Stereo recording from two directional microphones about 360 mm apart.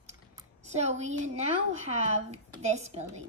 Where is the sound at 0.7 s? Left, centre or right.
Centre.